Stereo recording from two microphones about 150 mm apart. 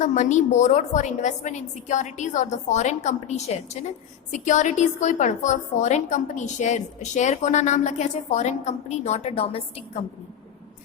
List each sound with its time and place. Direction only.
0.0 s a woman's voice: 55° left (ahead or behind)